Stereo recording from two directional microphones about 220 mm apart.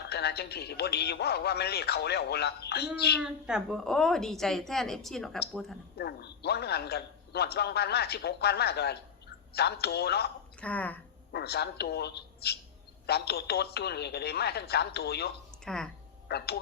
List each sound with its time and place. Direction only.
0.1 s a man's voice: 45° left (ahead or behind)
3.2 s a woman's voice: 5° right (ahead or behind)
6.0 s a man's voice: 45° left (ahead or behind)
10.6 s speech: 5° left (ahead or behind)
11.3 s a man's voice: 45° left (ahead or behind)
15.6 s speech: 5° left (ahead or behind)
16.3 s a man's voice: 45° left (ahead or behind)